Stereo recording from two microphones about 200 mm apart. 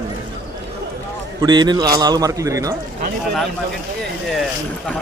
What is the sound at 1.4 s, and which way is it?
Speech, 20° right (ahead or behind).